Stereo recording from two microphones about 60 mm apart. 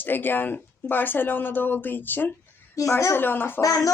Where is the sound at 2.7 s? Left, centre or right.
Left.